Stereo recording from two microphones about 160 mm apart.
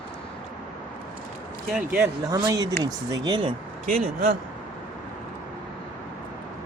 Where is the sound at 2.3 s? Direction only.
25° right (ahead or behind).